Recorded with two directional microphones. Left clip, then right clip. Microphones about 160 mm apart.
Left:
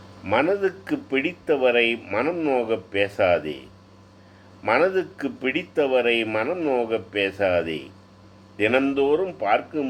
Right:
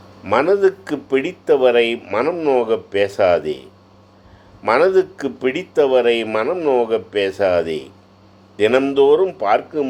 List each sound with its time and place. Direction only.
0.3 s speech: 40° right (ahead or behind)
4.6 s speech: 40° right (ahead or behind)